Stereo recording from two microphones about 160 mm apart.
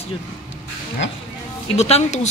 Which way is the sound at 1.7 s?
45° left (ahead or behind).